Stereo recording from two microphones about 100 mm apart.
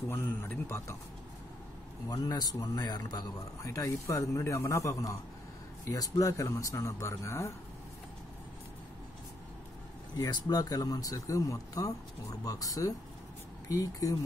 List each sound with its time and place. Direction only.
0.1 s speech: 25° left (ahead or behind)
2.0 s a man's voice: 40° left (ahead or behind)
10.1 s a man's voice: 40° left (ahead or behind)